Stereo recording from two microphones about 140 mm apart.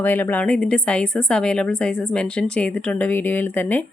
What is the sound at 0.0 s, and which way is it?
Speech, 15° left (ahead or behind).